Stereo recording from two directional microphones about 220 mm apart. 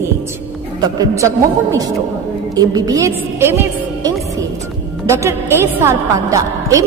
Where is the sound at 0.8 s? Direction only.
15° right (ahead or behind).